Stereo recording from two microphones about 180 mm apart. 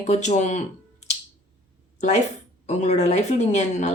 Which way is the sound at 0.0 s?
40° left (ahead or behind).